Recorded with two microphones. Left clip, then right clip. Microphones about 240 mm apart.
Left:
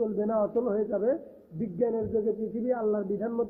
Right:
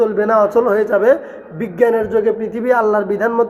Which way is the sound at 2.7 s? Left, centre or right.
Centre.